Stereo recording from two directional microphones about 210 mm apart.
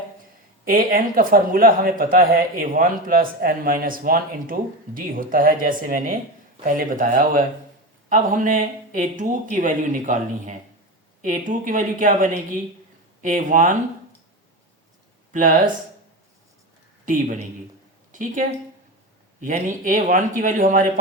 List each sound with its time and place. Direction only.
0.6 s a man's voice: 45° right (ahead or behind)
15.3 s speech: 40° right (ahead or behind)
18.1 s speech: 40° right (ahead or behind)